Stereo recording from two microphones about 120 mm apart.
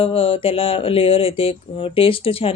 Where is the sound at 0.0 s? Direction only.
50° left (ahead or behind).